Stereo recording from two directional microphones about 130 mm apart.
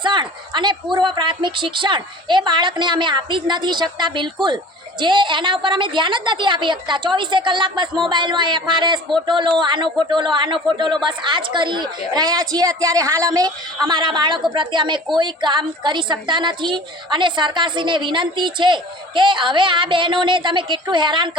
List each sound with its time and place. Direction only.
0.0 s a woman's voice: 35° right (ahead or behind)